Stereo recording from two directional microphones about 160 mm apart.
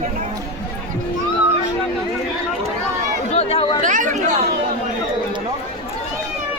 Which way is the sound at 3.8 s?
55° right (ahead or behind).